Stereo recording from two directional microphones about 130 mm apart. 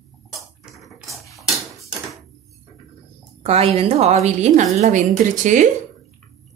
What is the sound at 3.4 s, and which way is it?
A woman's voice, 50° right (ahead or behind).